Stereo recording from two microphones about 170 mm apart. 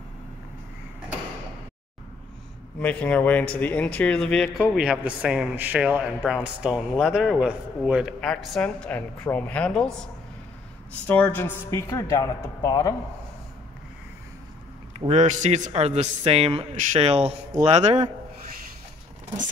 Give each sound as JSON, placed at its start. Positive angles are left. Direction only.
{"t": 2.8, "sound": "speech", "side_deg": 5}
{"t": 11.1, "sound": "speech", "side_deg": 10}
{"t": 15.0, "sound": "speech", "side_deg": -40}